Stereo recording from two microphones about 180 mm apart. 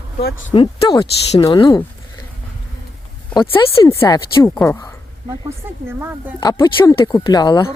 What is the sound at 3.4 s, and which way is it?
Speech, 15° left (ahead or behind).